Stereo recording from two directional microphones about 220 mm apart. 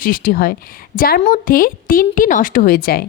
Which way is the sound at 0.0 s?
40° left (ahead or behind).